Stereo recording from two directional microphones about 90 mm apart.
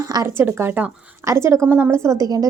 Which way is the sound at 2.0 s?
35° right (ahead or behind).